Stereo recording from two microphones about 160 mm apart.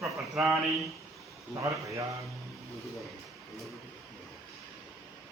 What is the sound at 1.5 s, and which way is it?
Speech, 20° right (ahead or behind).